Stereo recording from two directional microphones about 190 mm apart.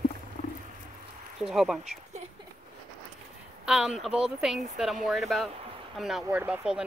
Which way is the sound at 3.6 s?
5° right (ahead or behind).